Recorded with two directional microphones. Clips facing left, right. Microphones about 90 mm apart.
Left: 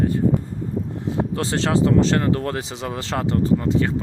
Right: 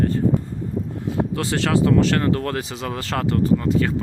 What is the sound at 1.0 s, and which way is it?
Speech, 25° left (ahead or behind).